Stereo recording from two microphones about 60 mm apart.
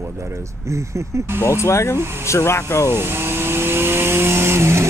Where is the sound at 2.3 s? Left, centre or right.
Left.